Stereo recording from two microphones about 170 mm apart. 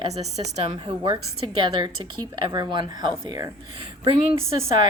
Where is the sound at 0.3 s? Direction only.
35° right (ahead or behind).